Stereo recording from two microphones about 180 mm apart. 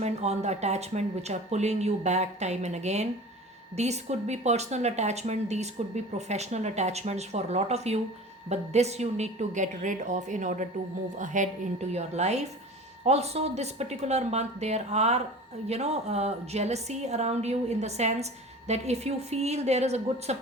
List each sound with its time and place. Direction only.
0.0 s speech: 35° right (ahead or behind)